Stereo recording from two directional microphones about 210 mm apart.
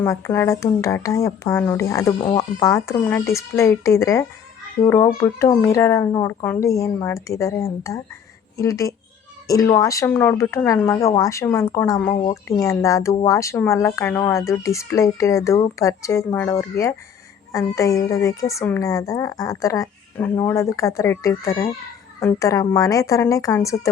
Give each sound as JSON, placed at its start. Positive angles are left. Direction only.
{"t": 0.0, "sound": "speech", "side_deg": 15}